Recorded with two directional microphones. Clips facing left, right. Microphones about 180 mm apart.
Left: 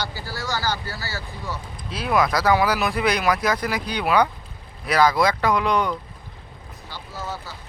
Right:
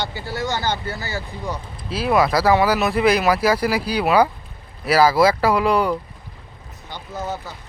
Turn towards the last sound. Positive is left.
turn(degrees=-20)  # may be behind; listen again after turning